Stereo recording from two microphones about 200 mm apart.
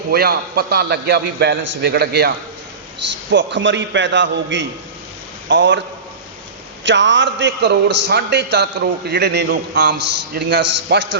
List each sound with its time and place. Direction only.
0.1 s a man's voice: 50° right (ahead or behind)
3.3 s a man's voice: 65° right (ahead or behind)
6.8 s a man's voice: 65° right (ahead or behind)